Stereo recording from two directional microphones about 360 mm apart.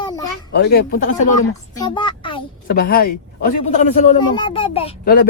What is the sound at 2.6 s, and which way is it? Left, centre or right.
Speech, left.